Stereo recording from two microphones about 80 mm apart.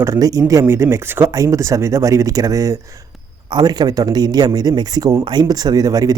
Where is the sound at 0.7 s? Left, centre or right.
Right.